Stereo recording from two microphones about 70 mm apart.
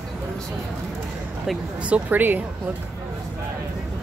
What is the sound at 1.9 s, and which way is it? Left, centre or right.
Speech, right.